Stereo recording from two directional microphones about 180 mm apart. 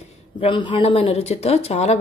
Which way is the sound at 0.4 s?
25° left (ahead or behind).